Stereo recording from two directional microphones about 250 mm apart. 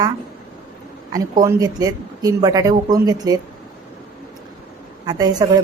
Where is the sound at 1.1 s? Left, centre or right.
Centre.